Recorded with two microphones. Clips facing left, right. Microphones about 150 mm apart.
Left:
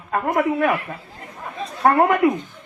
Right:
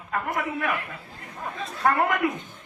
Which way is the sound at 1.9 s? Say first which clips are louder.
Left 9 dB; 25° left (ahead or behind).